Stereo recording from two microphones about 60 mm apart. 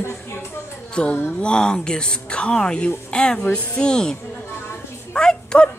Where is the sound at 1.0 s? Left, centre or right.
Centre.